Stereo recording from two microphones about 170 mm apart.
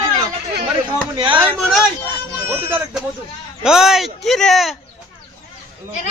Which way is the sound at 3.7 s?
5° right (ahead or behind).